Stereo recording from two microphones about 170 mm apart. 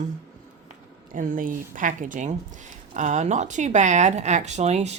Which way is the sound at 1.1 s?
50° right (ahead or behind).